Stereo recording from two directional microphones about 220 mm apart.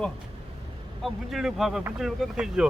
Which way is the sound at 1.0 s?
Centre (ahead or behind).